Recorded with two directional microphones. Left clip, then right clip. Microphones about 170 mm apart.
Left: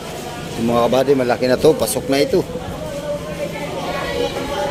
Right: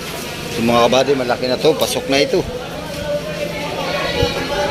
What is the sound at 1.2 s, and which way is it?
Speech, 45° left (ahead or behind).